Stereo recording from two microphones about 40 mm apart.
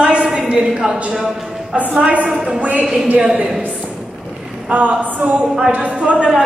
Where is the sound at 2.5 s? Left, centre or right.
Right.